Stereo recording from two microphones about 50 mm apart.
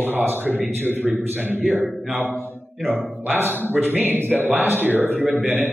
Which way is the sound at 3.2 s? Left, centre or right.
Right.